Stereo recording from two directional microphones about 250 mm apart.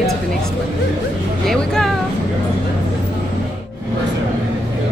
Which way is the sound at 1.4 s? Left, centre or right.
Centre.